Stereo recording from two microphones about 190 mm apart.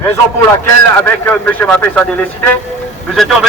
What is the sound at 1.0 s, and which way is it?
A man's voice, 10° left (ahead or behind).